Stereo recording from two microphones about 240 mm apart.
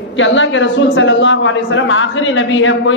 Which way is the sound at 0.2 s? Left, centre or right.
Left.